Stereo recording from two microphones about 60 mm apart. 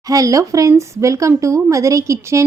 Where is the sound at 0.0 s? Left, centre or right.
Right.